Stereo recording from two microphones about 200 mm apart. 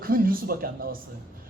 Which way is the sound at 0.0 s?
45° right (ahead or behind).